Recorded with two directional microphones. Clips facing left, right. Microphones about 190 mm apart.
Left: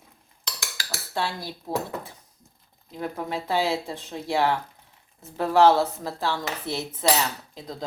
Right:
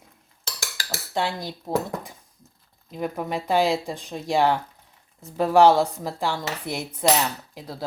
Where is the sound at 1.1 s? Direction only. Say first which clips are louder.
Right 3 dB; 20° right (ahead or behind).